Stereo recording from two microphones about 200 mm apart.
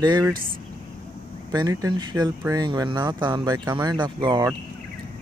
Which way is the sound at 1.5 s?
20° right (ahead or behind).